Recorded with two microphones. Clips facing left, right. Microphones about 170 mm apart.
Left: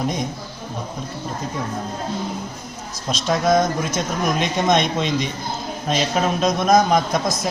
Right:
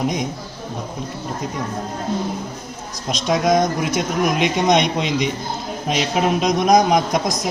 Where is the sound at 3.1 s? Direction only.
15° right (ahead or behind).